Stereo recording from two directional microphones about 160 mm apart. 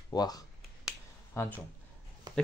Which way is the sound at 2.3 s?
25° right (ahead or behind).